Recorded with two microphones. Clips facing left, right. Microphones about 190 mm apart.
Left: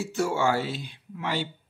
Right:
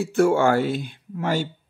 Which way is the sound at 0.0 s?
55° right (ahead or behind).